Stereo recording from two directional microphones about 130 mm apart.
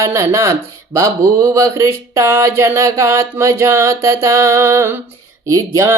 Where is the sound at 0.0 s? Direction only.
20° right (ahead or behind).